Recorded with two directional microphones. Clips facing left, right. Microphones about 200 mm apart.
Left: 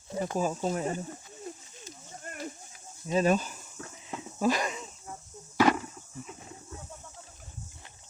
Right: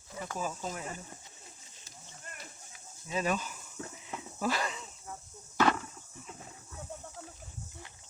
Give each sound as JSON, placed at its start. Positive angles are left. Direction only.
{"t": 0.1, "sound": "speech", "side_deg": 35}
{"t": 2.2, "sound": "a sound", "side_deg": 50}
{"t": 3.1, "sound": "speech", "side_deg": 35}
{"t": 3.8, "sound": "horse", "side_deg": -20}
{"t": 4.1, "sound": "wheeze", "side_deg": 20}
{"t": 5.5, "sound": "a sound", "side_deg": 10}